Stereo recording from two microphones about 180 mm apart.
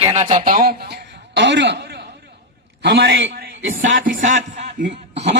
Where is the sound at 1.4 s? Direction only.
80° right.